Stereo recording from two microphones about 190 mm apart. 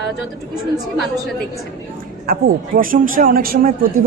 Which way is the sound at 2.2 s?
50° right (ahead or behind).